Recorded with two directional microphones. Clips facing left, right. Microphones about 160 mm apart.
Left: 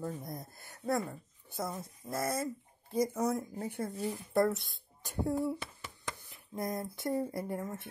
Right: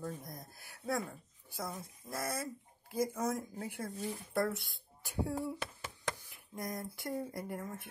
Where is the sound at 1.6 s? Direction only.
25° left (ahead or behind).